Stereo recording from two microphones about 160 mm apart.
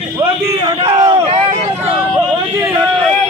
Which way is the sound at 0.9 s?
25° right (ahead or behind).